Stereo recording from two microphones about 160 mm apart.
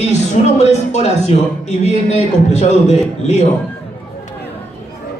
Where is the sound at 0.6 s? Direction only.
45° left (ahead or behind).